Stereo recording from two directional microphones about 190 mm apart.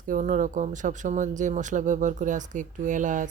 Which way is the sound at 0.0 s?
45° right (ahead or behind).